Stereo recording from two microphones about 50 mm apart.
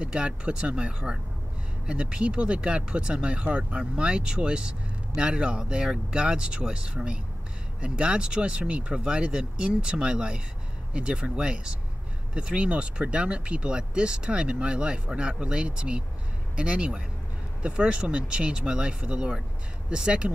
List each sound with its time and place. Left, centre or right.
0.0 s speech: centre